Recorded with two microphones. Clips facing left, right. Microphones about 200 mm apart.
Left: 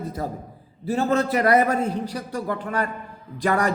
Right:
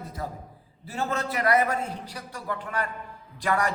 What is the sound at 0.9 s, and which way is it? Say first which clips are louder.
A man's voice: left 8 dB; 35° left (ahead or behind).